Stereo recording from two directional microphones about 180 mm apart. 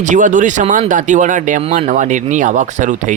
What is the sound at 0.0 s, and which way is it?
Speech, 45° right (ahead or behind).